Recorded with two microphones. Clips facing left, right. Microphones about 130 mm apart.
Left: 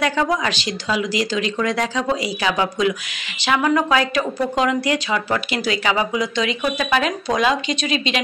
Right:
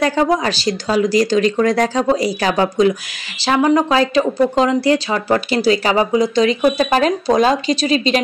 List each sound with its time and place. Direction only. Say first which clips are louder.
0.0 s speech: right 4 dB; 35° right (ahead or behind)